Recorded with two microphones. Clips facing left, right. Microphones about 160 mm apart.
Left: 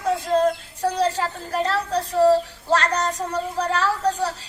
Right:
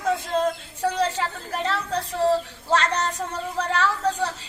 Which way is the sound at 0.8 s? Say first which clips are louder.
Left 1 dB; 40° left (ahead or behind).